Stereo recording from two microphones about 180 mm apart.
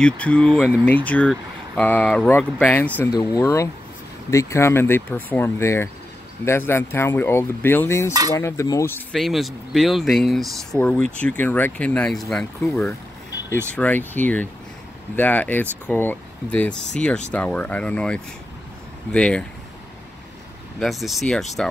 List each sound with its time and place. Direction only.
0.0 s speech: 5° left (ahead or behind)
9.1 s speech: centre (ahead or behind)
20.8 s speech: centre (ahead or behind)